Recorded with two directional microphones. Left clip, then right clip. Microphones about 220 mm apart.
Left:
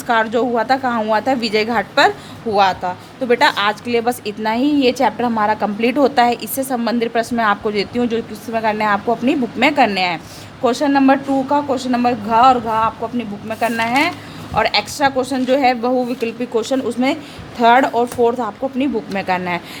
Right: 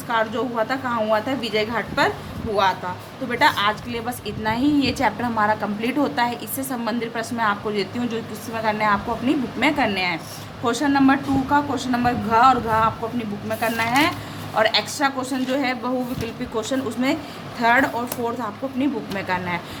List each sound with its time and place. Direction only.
0.1 s a woman's voice: 50° left (ahead or behind)
3.2 s a woman's voice: 45° left (ahead or behind)
10.6 s a woman's voice: 30° left (ahead or behind)